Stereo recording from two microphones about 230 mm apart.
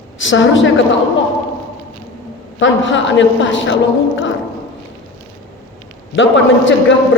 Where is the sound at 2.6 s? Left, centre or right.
Left.